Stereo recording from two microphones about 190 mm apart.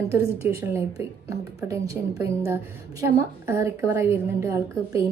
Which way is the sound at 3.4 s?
15° right (ahead or behind).